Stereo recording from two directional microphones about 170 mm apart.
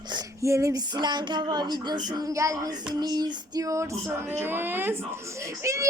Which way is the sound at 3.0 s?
25° right (ahead or behind).